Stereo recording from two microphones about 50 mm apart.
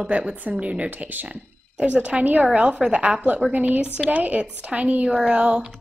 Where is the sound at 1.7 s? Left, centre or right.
Right.